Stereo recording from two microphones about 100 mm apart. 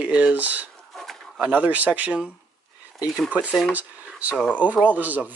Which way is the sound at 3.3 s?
15° right (ahead or behind).